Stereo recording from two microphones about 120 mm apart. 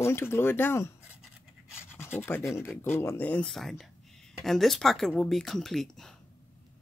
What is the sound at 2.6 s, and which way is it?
Speech, 15° left (ahead or behind).